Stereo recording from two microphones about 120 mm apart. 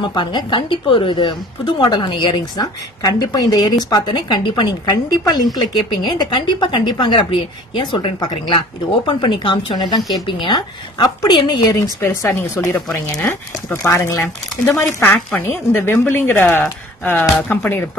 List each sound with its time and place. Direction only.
0.1 s a woman's voice: 40° left (ahead or behind); by 17.8 s 20° left (ahead or behind)